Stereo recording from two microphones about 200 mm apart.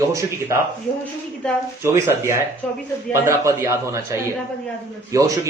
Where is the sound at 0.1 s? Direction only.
15° right (ahead or behind).